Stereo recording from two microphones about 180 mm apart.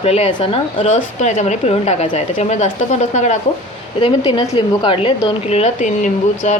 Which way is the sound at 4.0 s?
25° left (ahead or behind).